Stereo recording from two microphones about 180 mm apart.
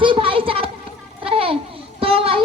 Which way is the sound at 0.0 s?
30° right (ahead or behind).